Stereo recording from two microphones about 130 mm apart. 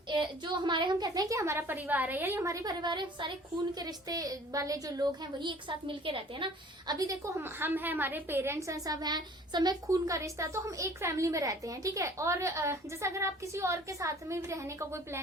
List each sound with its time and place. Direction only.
0.1 s a woman's voice: 40° right (ahead or behind)
6.9 s a woman's voice: 25° right (ahead or behind)